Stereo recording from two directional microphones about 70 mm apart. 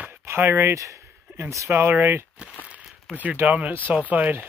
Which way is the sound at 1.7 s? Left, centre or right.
Right.